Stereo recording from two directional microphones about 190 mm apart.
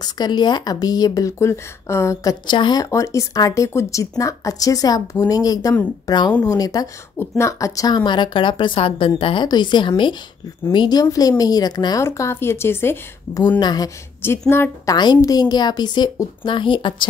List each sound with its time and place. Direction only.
0.0 s a woman's voice: 20° left (ahead or behind)